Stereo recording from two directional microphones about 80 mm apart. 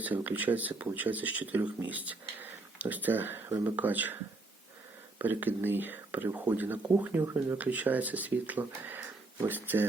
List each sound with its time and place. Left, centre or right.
0.0 s speech: right
5.2 s speech: right